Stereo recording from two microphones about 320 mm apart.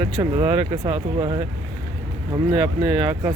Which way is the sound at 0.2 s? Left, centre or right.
Centre.